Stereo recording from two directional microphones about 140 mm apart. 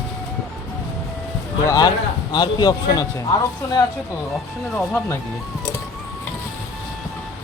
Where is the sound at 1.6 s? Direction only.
25° left (ahead or behind).